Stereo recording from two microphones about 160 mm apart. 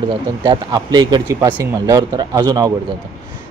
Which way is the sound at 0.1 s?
30° right (ahead or behind).